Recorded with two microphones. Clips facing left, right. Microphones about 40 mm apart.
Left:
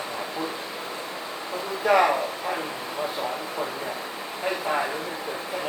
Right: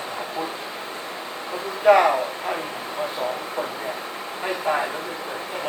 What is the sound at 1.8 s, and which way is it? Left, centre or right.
Speech, right.